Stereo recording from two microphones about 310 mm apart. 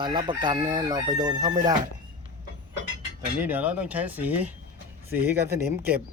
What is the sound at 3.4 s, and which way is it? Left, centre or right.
Speech, centre.